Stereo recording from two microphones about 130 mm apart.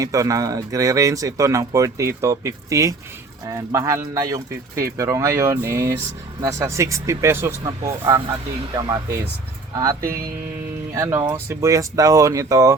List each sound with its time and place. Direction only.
0.0 s speech: 25° right (ahead or behind)